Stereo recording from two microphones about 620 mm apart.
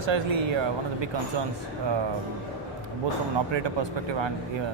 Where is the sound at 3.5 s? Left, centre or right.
Right.